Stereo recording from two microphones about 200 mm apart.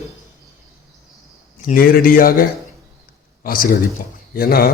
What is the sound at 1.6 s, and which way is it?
Speech, 45° left (ahead or behind).